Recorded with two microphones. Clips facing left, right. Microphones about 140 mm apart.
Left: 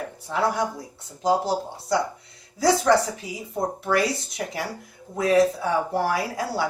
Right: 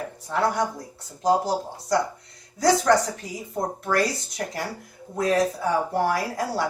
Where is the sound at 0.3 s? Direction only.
Centre (ahead or behind).